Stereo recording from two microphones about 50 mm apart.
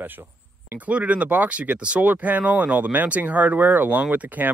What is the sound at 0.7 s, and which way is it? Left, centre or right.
Speech, right.